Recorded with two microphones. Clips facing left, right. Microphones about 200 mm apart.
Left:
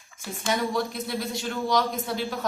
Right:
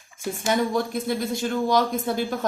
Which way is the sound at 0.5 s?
50° right (ahead or behind).